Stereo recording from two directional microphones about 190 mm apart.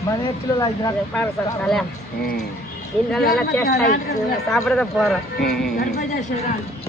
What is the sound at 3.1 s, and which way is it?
Speech, centre (ahead or behind).